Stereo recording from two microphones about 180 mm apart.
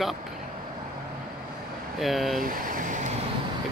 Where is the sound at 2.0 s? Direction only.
Centre (ahead or behind).